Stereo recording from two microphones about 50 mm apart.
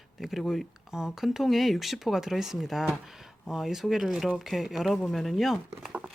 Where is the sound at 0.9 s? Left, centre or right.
Centre.